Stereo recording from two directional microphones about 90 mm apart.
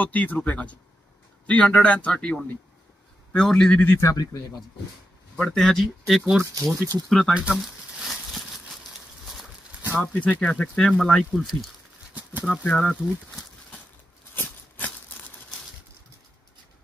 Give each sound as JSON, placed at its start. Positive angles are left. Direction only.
{"t": 0.0, "sound": "speech", "side_deg": 20}
{"t": 3.8, "sound": "speech", "side_deg": 25}
{"t": 4.1, "sound": "speech", "side_deg": 40}
{"t": 5.3, "sound": "speech", "side_deg": 10}
{"t": 6.4, "sound": "speech", "side_deg": -35}
{"t": 7.1, "sound": "speech", "side_deg": 5}
{"t": 7.3, "sound": "crumpling", "side_deg": -10}
{"t": 10.1, "sound": "speech", "side_deg": 15}
{"t": 12.1, "sound": "a sound", "side_deg": -15}
{"t": 12.4, "sound": "speech", "side_deg": 10}
{"t": 14.3, "sound": "a sound", "side_deg": 20}